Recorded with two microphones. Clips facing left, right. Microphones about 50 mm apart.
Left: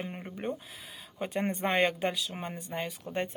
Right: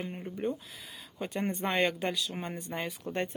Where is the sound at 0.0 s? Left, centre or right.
Centre.